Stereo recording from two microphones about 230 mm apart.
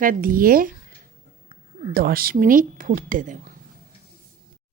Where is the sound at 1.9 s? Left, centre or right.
Right.